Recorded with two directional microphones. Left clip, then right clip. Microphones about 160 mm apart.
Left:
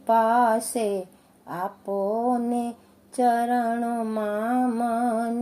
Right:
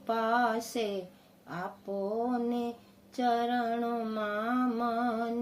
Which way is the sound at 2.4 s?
20° left (ahead or behind).